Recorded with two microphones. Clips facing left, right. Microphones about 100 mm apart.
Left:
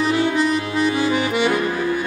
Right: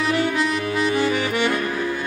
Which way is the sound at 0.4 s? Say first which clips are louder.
Left 3 dB; 15° left (ahead or behind).